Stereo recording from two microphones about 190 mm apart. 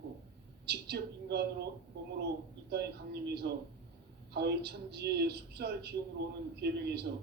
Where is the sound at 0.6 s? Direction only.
60° right (ahead or behind).